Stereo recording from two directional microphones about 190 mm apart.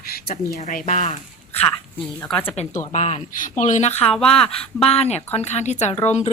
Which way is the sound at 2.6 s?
35° left (ahead or behind).